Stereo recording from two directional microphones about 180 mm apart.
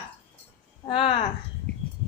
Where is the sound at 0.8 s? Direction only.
30° left (ahead or behind).